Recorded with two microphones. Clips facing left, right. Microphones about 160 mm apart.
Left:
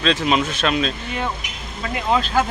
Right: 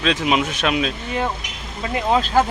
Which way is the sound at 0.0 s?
10° right (ahead or behind).